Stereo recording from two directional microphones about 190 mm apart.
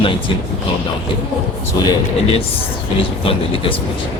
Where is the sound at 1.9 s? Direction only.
30° left (ahead or behind).